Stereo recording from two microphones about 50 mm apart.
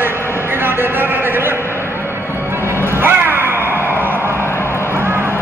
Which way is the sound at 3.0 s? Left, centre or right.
Right.